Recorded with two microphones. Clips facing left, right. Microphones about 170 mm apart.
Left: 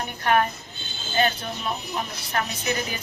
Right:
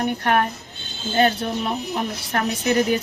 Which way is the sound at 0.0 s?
55° right (ahead or behind).